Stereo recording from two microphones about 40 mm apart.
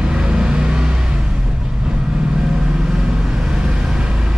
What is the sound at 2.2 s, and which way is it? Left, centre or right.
Vehicle, centre.